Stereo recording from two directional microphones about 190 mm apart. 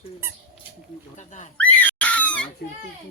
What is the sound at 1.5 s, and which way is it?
Screaming, 10° left (ahead or behind).